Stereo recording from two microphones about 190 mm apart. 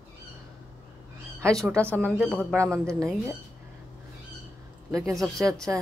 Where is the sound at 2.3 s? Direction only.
10° right (ahead or behind).